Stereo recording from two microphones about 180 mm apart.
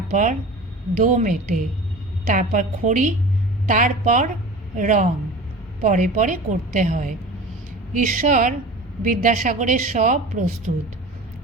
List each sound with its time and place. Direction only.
0.1 s a woman's voice: 45° right (ahead or behind)